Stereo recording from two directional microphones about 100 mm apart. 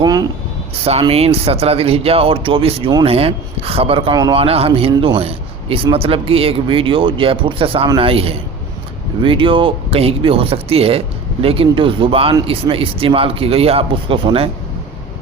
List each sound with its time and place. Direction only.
0.0 s speech: 40° right (ahead or behind)
0.9 s a man's voice: 90° right
11.4 s a man's voice: 70° right (ahead or behind)